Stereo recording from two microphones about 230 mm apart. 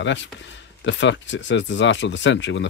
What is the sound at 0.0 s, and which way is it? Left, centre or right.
Speech, left.